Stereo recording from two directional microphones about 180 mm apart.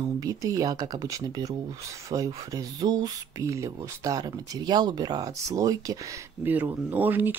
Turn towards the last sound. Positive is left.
turn(degrees=-10)  # may be behind; listen again after turning